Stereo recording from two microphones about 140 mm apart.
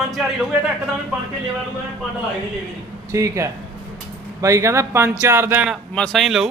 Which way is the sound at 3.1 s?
20° right (ahead or behind).